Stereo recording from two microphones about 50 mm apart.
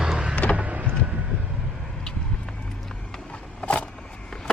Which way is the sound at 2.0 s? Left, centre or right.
Centre.